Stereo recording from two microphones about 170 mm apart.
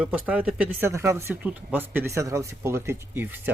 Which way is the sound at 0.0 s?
5° right (ahead or behind).